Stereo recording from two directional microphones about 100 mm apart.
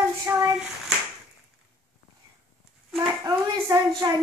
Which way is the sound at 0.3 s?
25° right (ahead or behind).